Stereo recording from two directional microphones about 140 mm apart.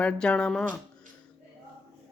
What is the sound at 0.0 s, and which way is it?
Speech, 5° left (ahead or behind).